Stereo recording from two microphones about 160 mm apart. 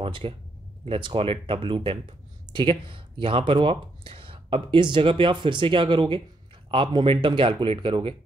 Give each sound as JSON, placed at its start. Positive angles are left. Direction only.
{"t": 0.0, "sound": "speech", "side_deg": -35}